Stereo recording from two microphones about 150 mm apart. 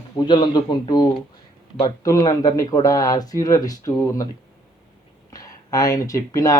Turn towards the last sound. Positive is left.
turn(degrees=25)  # may be behind; listen again after turning